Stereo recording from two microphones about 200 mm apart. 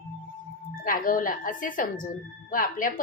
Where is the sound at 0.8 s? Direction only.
45° left (ahead or behind).